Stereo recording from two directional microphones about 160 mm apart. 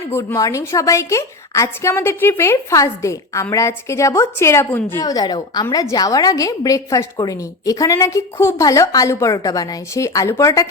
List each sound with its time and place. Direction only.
0.1 s a woman's voice: 15° left (ahead or behind)